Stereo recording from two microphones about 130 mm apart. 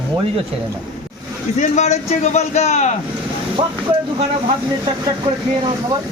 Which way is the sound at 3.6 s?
40° right (ahead or behind).